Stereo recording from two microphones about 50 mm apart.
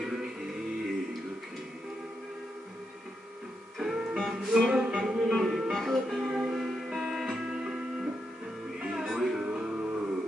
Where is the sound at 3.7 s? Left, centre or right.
Centre.